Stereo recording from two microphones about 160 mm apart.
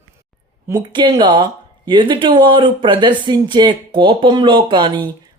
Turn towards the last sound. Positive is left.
turn(degrees=-30)  # may be behind; listen again after turning